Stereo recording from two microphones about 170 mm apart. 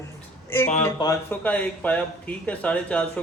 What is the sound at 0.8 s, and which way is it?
A woman's voice, 15° left (ahead or behind).